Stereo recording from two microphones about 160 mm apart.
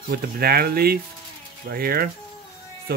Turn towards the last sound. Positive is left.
turn(degrees=-70)  # may be behind; listen again after turning